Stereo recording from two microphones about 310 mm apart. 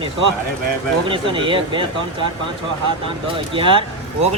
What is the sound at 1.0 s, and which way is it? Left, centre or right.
Speech, centre.